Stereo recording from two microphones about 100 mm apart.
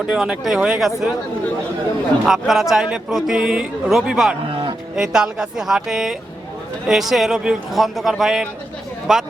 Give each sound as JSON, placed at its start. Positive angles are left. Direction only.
{"t": 0.0, "sound": "speech", "side_deg": -5}
{"t": 2.2, "sound": "speech", "side_deg": -5}
{"t": 4.4, "sound": "cattle", "side_deg": -55}
{"t": 4.9, "sound": "speech", "side_deg": -5}